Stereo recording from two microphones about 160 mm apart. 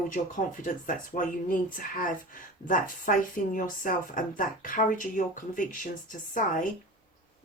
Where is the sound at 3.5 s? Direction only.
60° left (ahead or behind).